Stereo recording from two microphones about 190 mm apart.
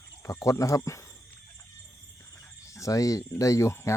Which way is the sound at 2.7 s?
15° left (ahead or behind).